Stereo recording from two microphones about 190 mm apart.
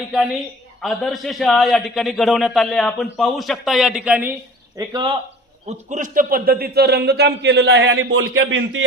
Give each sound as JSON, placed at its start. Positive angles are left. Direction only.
{"t": 0.1, "sound": "a man's voice", "side_deg": -5}
{"t": 4.8, "sound": "speech", "side_deg": -20}
{"t": 5.6, "sound": "a man's voice", "side_deg": -40}